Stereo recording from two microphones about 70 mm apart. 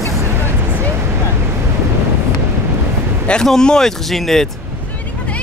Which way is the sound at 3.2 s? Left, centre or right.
Centre.